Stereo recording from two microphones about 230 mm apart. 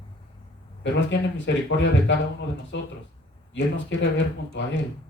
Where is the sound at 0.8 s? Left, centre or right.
Left.